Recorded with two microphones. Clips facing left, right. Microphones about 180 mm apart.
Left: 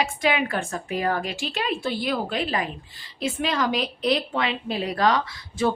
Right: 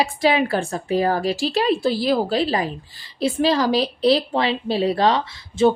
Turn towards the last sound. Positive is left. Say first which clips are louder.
# right 6 dB
turn(degrees=-25)  # may be behind; listen again after turning